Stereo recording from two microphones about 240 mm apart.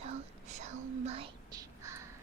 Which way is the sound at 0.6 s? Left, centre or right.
Right.